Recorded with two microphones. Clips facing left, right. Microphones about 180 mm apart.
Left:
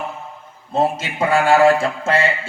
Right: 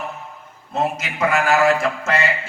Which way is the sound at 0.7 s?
30° left (ahead or behind).